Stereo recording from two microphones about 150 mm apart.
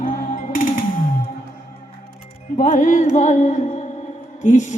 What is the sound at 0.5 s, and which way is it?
Music, 65° left (ahead or behind).